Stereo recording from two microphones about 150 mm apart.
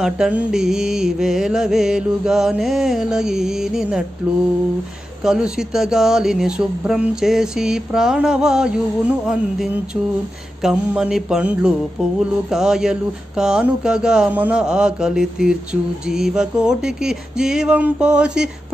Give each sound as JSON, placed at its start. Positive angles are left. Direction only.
{"t": 0.0, "sound": "speech", "side_deg": -5}
{"t": 5.2, "sound": "speech", "side_deg": -5}